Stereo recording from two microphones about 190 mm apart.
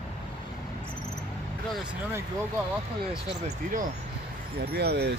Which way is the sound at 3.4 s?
45° right (ahead or behind).